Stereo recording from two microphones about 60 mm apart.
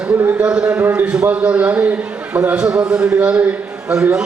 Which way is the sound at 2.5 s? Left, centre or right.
Centre.